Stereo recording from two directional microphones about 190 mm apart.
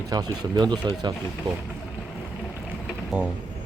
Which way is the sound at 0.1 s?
20° right (ahead or behind).